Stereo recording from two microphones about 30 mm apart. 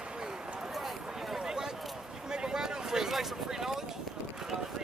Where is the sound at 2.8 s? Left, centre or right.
Centre.